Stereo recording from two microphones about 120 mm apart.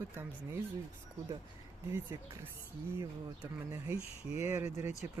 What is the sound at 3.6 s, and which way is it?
Speech, 25° right (ahead or behind).